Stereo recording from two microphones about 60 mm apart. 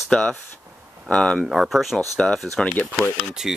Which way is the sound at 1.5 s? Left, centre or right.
Centre.